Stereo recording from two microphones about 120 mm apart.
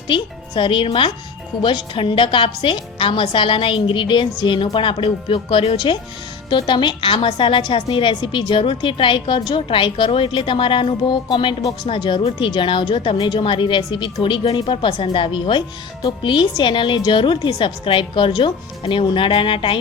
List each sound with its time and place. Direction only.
0.1 s a woman's voice: 40° left (ahead or behind)